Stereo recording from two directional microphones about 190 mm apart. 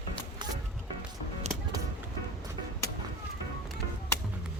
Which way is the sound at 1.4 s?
35° right (ahead or behind).